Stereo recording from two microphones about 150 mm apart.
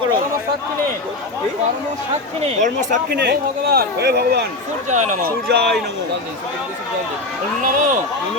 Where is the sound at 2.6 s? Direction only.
75° right (ahead or behind).